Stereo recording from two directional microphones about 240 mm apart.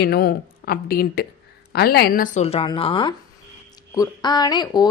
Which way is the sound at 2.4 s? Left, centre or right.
Left.